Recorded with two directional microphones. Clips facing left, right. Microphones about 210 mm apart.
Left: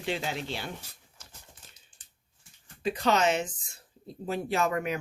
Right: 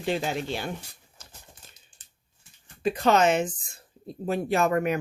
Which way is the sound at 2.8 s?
50° right (ahead or behind).